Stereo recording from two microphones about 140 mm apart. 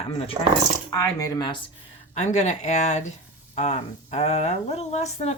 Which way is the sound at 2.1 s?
55° left (ahead or behind).